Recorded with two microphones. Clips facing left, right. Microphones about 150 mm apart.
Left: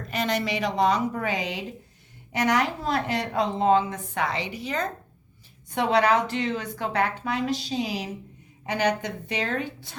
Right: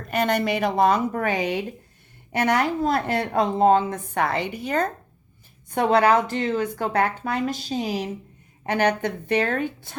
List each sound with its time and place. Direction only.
0.1 s a woman's voice: 55° right (ahead or behind)
8.6 s a woman's voice: 55° right (ahead or behind)